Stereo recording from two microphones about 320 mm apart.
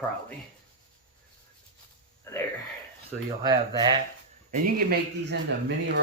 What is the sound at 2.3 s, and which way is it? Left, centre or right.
Speech, centre.